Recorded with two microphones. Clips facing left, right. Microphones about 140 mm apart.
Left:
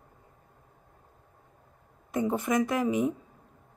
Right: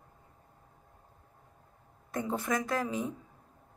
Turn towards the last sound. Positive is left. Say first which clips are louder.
# left 6 dB
turn(degrees=15)  # may be behind; listen again after turning